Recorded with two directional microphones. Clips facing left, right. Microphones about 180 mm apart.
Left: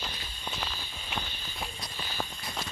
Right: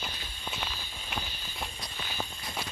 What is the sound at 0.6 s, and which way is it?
Walk, centre (ahead or behind).